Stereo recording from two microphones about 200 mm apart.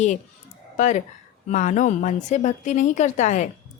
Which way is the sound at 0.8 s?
40° left (ahead or behind).